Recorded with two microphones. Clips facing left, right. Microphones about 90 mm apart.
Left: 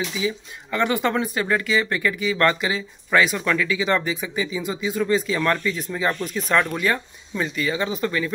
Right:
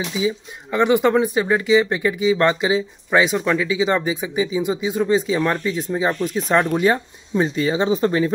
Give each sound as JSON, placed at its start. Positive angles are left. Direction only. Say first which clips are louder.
{"t": 0.2, "sound": "speech", "louder": "right 4 dB", "side_deg": -15}